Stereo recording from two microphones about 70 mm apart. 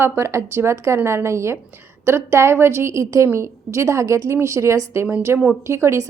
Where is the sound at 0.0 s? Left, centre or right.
Right.